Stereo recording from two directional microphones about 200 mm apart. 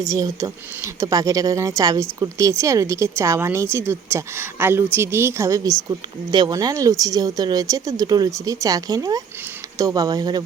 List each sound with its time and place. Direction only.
0.0 s speech: 15° right (ahead or behind)